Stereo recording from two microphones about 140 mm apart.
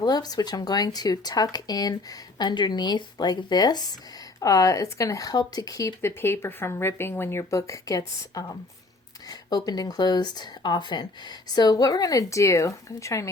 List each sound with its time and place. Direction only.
0.0 s speech: 30° left (ahead or behind)